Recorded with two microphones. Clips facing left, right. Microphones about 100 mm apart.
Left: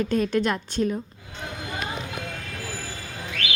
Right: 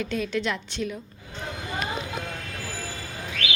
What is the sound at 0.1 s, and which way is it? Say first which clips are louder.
Speech: left 4 dB; 45° left (ahead or behind).